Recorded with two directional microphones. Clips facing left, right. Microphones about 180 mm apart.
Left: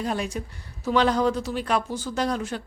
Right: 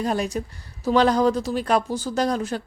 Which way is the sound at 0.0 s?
40° right (ahead or behind).